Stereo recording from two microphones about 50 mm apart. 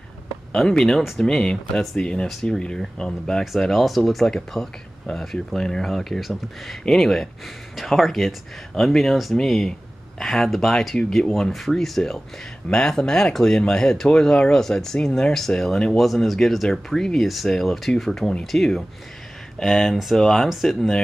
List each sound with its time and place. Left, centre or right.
0.5 s speech: centre